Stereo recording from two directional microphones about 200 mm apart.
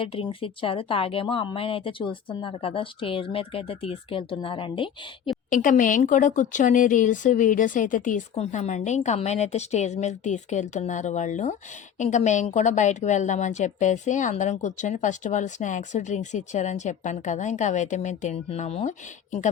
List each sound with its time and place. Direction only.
0.0 s speech: 25° left (ahead or behind)
5.5 s speech: 40° left (ahead or behind)